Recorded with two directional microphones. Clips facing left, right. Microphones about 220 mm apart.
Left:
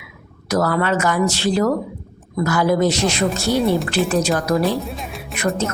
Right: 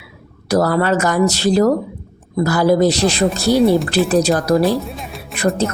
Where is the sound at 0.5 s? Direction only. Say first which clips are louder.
Right 3 dB; 35° right (ahead or behind).